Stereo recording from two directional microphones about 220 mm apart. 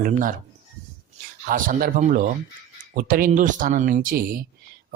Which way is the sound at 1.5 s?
40° right (ahead or behind).